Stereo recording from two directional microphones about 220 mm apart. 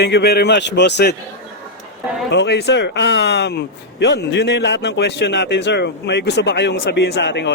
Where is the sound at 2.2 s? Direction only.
50° left (ahead or behind).